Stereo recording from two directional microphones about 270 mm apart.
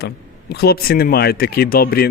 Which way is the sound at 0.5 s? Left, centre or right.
Left.